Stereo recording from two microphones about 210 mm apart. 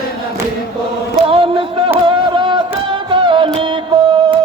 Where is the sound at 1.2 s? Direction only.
25° right (ahead or behind).